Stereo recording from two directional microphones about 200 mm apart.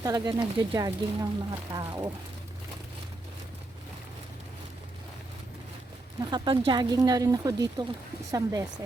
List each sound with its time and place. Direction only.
0.0 s speech: 20° right (ahead or behind)
6.1 s speech: 20° right (ahead or behind)